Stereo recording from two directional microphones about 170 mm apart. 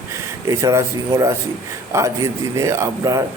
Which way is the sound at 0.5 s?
20° right (ahead or behind).